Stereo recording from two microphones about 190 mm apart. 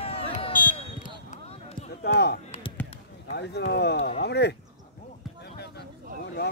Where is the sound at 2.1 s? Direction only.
60° left (ahead or behind).